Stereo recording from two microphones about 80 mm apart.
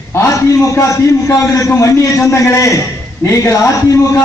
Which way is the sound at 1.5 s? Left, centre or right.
Left.